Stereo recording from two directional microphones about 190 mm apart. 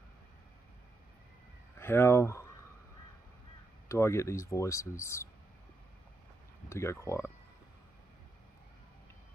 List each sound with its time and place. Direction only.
1.8 s speech: 10° left (ahead or behind)
3.9 s speech: 15° left (ahead or behind)
6.7 s speech: 15° left (ahead or behind)